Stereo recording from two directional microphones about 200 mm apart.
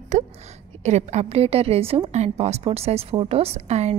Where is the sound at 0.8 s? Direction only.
35° right (ahead or behind).